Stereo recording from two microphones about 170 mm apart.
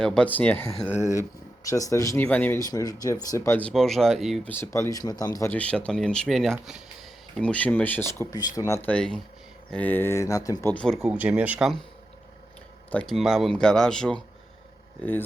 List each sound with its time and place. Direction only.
0.0 s speech: 5° left (ahead or behind)
4.4 s speech: 15° left (ahead or behind)
7.4 s speech: 10° left (ahead or behind)
8.9 s speech: 5° left (ahead or behind)
12.9 s speech: 5° left (ahead or behind)